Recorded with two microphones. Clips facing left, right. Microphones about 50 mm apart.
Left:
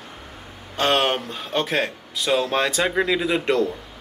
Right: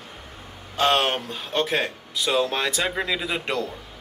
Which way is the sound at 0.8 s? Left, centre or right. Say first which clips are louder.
Left 1 dB; centre.